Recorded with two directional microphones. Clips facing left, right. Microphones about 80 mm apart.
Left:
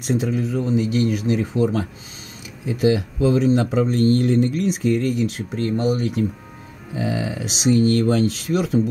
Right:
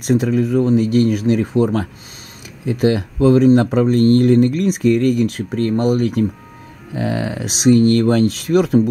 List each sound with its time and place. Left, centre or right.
0.0 s speech: right